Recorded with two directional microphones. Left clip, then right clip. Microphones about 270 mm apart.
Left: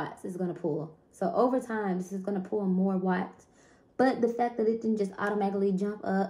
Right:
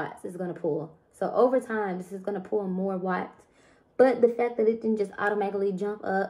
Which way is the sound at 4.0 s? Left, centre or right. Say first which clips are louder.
Right 5 dB; centre.